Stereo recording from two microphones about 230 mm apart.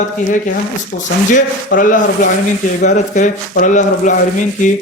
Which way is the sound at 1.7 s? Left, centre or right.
Left.